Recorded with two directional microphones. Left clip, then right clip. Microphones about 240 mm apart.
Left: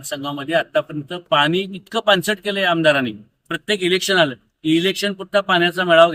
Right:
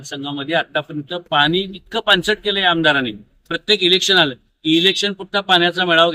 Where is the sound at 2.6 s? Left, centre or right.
Centre.